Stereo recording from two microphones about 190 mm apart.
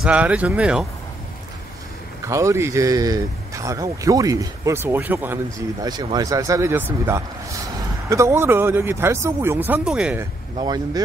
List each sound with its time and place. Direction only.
0.0 s speech: 5° right (ahead or behind)
2.2 s speech: 15° right (ahead or behind)
5.9 s speech: 20° right (ahead or behind); by 10.2 s 5° right (ahead or behind)
10.6 s speech: 20° right (ahead or behind)